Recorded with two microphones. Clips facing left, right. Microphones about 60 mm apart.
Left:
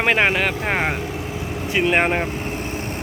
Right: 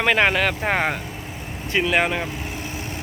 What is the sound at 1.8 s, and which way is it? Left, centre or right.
Speech, left.